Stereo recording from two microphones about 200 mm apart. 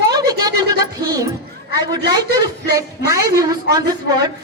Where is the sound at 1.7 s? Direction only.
20° right (ahead or behind).